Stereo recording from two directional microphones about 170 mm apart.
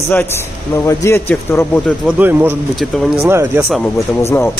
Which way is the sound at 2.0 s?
10° right (ahead or behind).